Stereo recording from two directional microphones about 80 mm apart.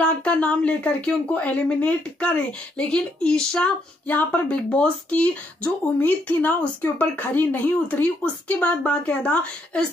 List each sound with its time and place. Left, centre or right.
0.0 s speech: centre